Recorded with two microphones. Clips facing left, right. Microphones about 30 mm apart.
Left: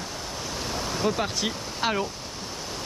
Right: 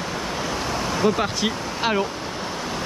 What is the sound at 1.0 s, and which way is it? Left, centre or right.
Speech, centre.